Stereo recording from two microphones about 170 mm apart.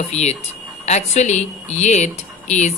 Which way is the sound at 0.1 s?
40° left (ahead or behind).